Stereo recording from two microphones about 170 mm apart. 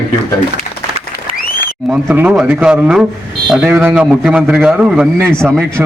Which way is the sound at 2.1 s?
5° right (ahead or behind).